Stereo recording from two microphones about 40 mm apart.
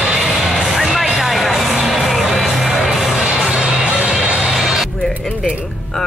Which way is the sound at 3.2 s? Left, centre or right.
Centre.